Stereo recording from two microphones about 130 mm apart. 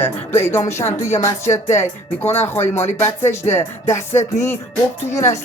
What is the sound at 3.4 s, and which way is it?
Music, 20° left (ahead or behind).